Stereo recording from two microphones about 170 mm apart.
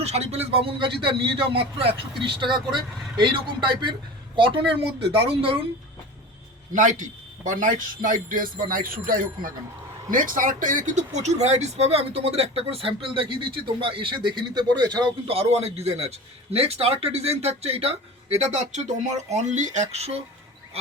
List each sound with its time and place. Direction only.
0.0 s a woman's voice: 40° right (ahead or behind)
6.7 s a man's voice: 50° right (ahead or behind)